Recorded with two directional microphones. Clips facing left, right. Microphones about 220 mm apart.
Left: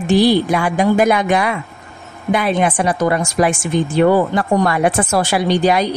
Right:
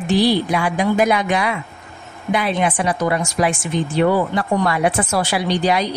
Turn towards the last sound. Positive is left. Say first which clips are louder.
# left 4 dB
turn(degrees=50)  # may be behind; listen again after turning